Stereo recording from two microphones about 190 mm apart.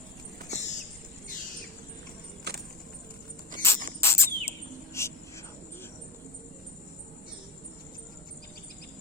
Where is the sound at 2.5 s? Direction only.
60° right (ahead or behind).